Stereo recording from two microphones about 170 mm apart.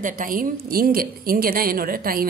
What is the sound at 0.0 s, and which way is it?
A woman's voice, 55° right (ahead or behind).